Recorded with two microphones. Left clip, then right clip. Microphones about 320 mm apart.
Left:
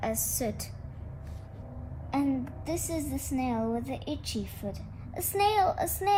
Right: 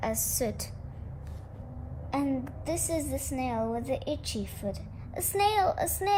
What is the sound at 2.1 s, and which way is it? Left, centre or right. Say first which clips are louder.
A woman's voice: left 1 dB; right.